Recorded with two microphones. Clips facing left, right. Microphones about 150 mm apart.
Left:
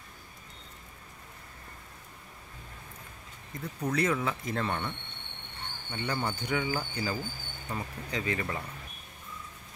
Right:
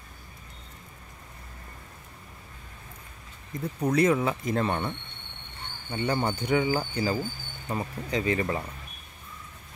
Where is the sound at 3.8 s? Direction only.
25° right (ahead or behind).